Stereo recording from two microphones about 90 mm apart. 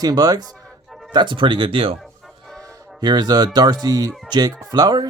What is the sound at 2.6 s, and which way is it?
Speech, 50° right (ahead or behind).